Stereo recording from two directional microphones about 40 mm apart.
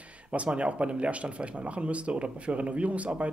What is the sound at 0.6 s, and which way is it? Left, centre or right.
Speech, right.